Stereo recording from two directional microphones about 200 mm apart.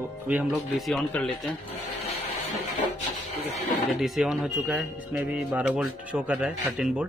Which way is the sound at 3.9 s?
Centre (ahead or behind).